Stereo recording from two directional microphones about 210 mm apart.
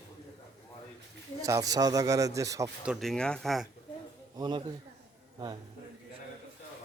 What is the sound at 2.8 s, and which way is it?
Speech, centre (ahead or behind).